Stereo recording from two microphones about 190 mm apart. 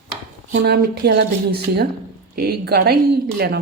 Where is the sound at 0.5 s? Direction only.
55° right (ahead or behind).